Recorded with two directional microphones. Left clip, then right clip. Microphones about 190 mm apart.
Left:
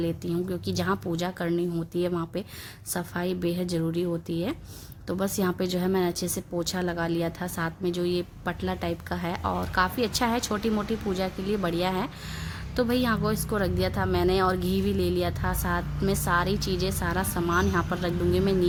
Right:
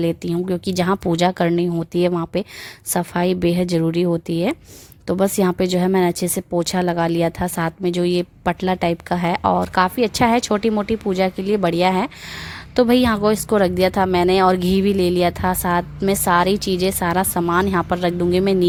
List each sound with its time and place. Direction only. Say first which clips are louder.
0.0 s speech: right 8 dB; 40° right (ahead or behind)